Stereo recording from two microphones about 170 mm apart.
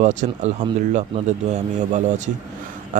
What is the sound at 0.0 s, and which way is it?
Speech, 45° right (ahead or behind).